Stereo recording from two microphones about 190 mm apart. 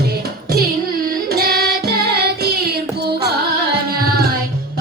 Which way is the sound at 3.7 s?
55° right (ahead or behind).